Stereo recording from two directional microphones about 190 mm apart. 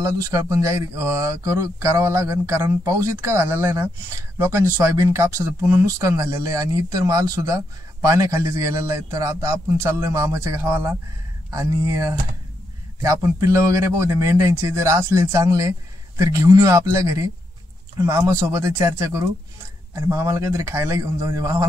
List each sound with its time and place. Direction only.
0.0 s speech: 15° right (ahead or behind)